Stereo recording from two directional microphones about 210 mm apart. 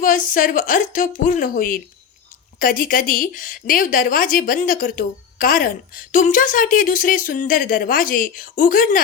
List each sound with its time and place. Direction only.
0.0 s a woman's voice: 40° left (ahead or behind)